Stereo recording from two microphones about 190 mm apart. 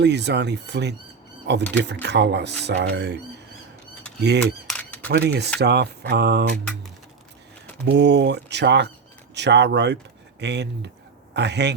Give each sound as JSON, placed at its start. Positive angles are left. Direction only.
{"t": 0.0, "sound": "speech", "side_deg": -65}
{"t": 4.2, "sound": "speech", "side_deg": -65}
{"t": 4.6, "sound": "camera", "side_deg": 5}
{"t": 5.0, "sound": "speech", "side_deg": -60}
{"t": 7.9, "sound": "speech", "side_deg": -65}